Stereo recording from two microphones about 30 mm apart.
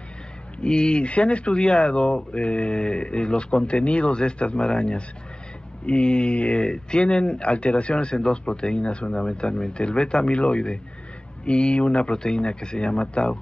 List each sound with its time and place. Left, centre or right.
0.6 s speech: left
1.0 s speech: left
6.6 s speech: left
12.1 s speech: left